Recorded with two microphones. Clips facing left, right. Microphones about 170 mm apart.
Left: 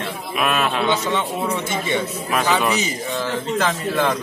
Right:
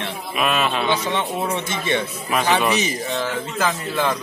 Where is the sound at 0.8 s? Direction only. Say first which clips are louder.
Left 1 dB; 10° right (ahead or behind).